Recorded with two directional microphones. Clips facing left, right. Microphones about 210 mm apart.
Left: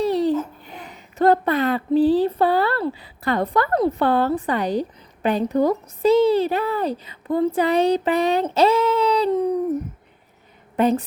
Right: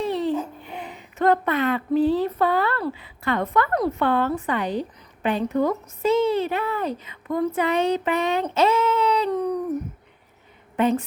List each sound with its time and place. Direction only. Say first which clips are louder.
0.0 s babbling: left 4 dB; 35° left (ahead or behind)
0.6 s speech: right 3 dB; 40° left (ahead or behind); by 9.6 s 25° left (ahead or behind)
10.8 s a woman's voice: left 2 dB; 40° left (ahead or behind)